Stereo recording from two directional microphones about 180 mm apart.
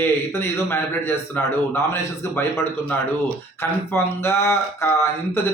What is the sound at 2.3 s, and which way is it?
Speech, 15° left (ahead or behind).